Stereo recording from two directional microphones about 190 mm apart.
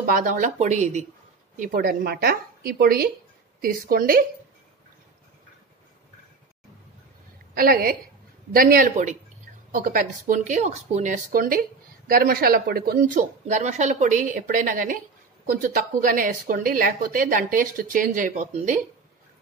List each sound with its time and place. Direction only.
0.0 s speech: 45° right (ahead or behind)
1.6 s a woman's voice: 50° right (ahead or behind)
7.5 s a woman's voice: 50° right (ahead or behind)